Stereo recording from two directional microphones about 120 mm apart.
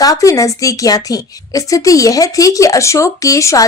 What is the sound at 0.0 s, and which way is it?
A woman's voice, 30° left (ahead or behind).